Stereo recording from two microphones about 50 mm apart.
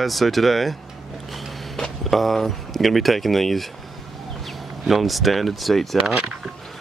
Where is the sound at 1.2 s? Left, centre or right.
Centre.